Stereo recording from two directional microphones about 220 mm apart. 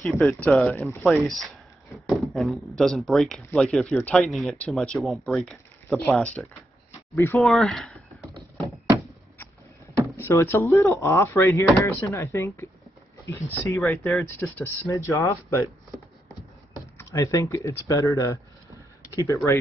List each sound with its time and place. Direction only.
0.0 s speech: 5° left (ahead or behind)
10.1 s speech: 10° left (ahead or behind)
17.0 s speech: 15° left (ahead or behind)